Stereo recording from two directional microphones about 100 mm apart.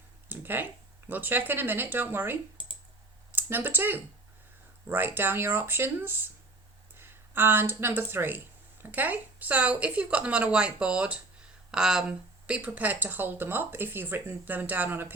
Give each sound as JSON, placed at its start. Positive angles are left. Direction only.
{"t": 0.3, "sound": "speech", "side_deg": -20}
{"t": 2.6, "sound": "clicking", "side_deg": 60}
{"t": 3.3, "sound": "speech", "side_deg": -20}